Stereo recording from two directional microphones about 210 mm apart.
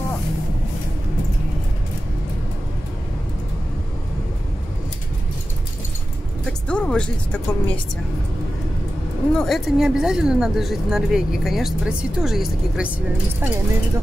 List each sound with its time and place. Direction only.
6.4 s speech: 5° left (ahead or behind)
9.3 s speech: centre (ahead or behind)